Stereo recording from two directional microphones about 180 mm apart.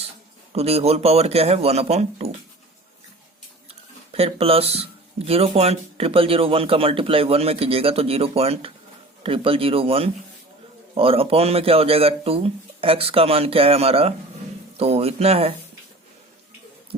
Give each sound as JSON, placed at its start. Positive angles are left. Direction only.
{"t": 0.5, "sound": "speech", "side_deg": -35}
{"t": 3.7, "sound": "speech", "side_deg": -35}